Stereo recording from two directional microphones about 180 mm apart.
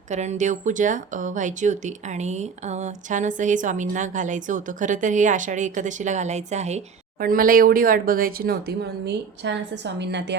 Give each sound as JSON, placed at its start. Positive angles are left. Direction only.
{"t": 0.1, "sound": "speech", "side_deg": -40}
{"t": 7.2, "sound": "speech", "side_deg": -50}